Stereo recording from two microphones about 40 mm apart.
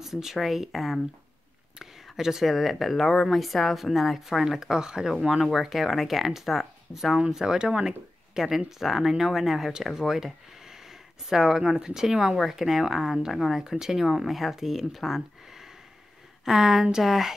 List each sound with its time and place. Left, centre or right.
0.0 s speech: centre
2.1 s speech: centre
5.4 s speech: centre